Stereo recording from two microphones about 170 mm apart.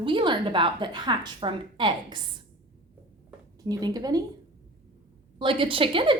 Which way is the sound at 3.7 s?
25° right (ahead or behind).